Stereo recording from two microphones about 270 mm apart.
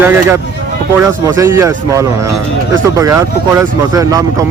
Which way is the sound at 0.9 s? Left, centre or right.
Centre.